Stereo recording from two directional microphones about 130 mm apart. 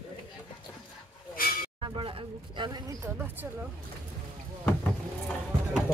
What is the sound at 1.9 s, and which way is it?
Speech, 45° right (ahead or behind).